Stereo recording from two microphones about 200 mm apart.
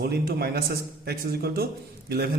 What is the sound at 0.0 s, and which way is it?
A man's voice, 50° right (ahead or behind).